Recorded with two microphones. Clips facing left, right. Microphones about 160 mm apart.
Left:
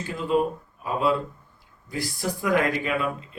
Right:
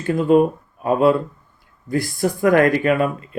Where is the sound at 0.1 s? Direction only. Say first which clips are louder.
Right 9 dB; 55° right (ahead or behind).